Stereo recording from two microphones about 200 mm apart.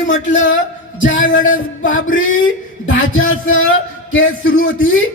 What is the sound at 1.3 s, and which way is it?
Music, 75° left (ahead or behind).